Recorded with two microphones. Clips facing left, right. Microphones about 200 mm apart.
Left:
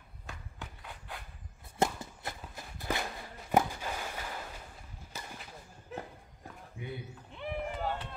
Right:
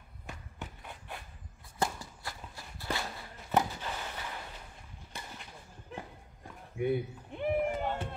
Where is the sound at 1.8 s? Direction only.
20° left (ahead or behind).